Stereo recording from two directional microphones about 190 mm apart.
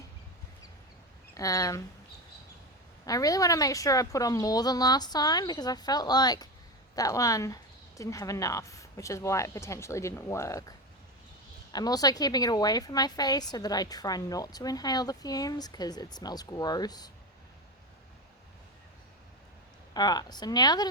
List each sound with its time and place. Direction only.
1.3 s speech: 15° left (ahead or behind)
3.1 s a woman's voice: 20° left (ahead or behind)
19.9 s a woman's voice: 20° left (ahead or behind)